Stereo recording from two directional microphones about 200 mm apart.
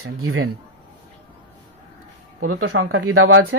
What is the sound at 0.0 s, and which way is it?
Speech, 90° right.